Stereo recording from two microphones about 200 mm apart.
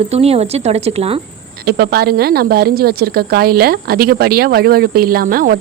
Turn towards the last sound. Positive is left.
turn(degrees=-45)  # may be behind; listen again after turning